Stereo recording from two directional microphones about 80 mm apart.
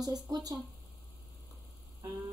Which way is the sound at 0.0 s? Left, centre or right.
Right.